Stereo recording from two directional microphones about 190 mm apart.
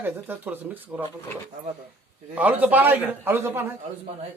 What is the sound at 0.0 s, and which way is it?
A man's voice, 10° right (ahead or behind).